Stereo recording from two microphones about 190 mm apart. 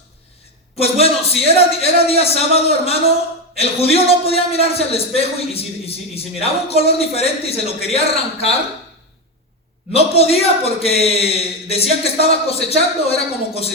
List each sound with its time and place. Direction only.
0.8 s a man's voice: 30° left (ahead or behind)
9.9 s a man's voice: 30° left (ahead or behind)